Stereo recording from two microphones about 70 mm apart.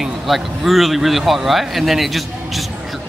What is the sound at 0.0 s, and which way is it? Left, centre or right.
Speech, centre.